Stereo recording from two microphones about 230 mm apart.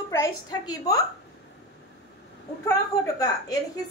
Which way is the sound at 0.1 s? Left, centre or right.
Centre.